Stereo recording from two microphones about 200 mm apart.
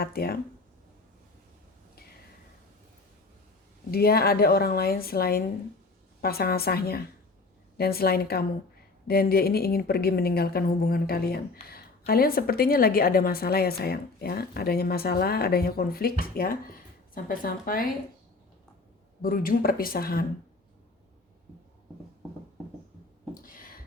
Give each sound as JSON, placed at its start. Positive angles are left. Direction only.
{"t": 0.0, "sound": "a woman's voice", "side_deg": 50}
{"t": 3.9, "sound": "a woman's voice", "side_deg": 50}
{"t": 19.2, "sound": "a woman's voice", "side_deg": 45}
{"t": 23.3, "sound": "a sound", "side_deg": 45}